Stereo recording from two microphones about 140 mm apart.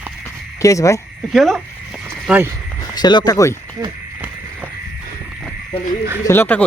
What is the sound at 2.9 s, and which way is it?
Speech, 30° left (ahead or behind).